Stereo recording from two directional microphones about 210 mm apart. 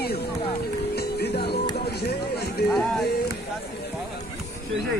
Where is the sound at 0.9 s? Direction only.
50° left (ahead or behind).